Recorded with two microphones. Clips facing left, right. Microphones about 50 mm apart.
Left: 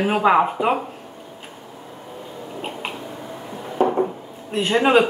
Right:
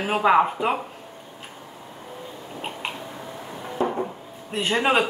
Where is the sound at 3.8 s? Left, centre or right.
Left.